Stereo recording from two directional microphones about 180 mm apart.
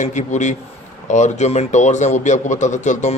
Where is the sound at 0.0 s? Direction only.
40° left (ahead or behind).